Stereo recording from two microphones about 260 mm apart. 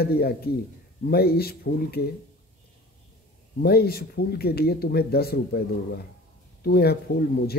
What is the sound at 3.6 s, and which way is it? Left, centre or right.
Speech, left.